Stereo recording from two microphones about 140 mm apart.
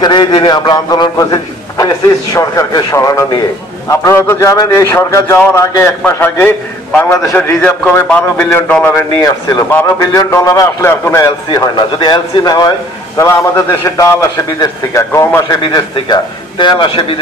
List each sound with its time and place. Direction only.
0.0 s a man's voice: 30° left (ahead or behind); by 8.7 s 15° left (ahead or behind)
8.9 s a man's voice: 25° left (ahead or behind)
15.6 s a man's voice: 30° left (ahead or behind)